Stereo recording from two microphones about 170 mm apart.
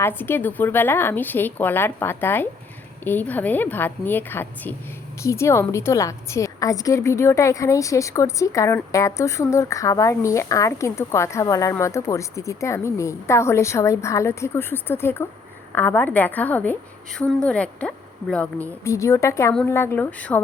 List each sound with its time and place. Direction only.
0.0 s a woman's voice: 10° left (ahead or behind)
18.9 s a woman's voice: 20° left (ahead or behind)